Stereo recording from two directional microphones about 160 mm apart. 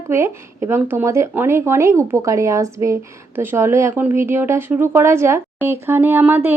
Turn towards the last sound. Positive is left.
turn(degrees=-15)  # may be behind; listen again after turning